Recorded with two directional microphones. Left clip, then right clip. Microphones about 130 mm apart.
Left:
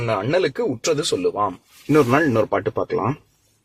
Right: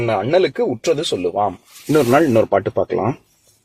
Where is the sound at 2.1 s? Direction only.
35° right (ahead or behind).